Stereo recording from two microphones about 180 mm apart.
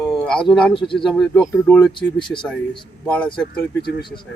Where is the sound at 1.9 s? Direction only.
25° left (ahead or behind).